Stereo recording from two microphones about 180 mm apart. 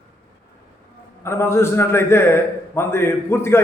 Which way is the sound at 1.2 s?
15° left (ahead or behind).